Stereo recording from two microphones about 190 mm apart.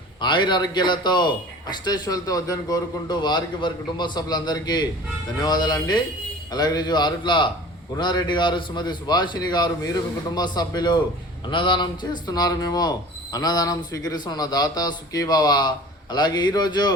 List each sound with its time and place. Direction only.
0.2 s speech: 25° left (ahead or behind)